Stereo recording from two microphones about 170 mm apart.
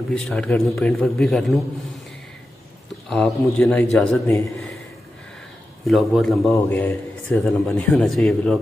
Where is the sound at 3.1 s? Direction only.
5° left (ahead or behind).